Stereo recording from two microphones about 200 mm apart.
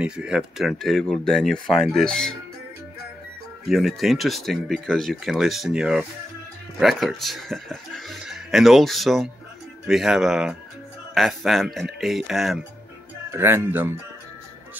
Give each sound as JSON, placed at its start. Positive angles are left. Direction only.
{"t": 0.0, "sound": "speech", "side_deg": -5}
{"t": 3.6, "sound": "speech", "side_deg": 0}
{"t": 13.3, "sound": "speech", "side_deg": -10}